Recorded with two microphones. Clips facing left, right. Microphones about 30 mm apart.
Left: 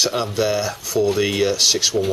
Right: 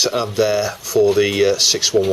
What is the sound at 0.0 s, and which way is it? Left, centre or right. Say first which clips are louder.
Speech: right 3 dB; centre.